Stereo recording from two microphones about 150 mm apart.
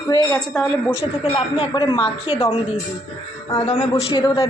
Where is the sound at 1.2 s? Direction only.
40° left (ahead or behind).